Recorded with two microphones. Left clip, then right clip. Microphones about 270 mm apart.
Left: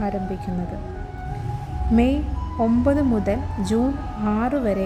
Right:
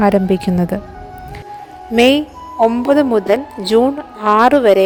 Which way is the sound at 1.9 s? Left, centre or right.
Right.